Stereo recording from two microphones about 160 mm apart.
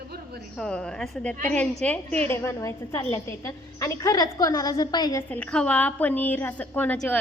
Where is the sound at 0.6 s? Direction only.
5° left (ahead or behind); by 5.2 s 25° left (ahead or behind).